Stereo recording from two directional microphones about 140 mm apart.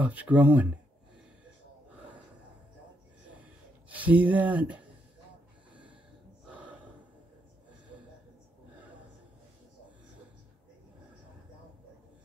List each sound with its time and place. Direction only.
0.0 s speech: 10° right (ahead or behind)
3.9 s speech: 10° right (ahead or behind)
6.5 s gasp: 10° right (ahead or behind)